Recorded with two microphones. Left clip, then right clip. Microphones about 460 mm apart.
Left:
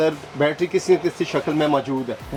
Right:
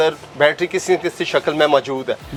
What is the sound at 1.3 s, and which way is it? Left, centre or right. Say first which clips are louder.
Speech: right 7 dB; right.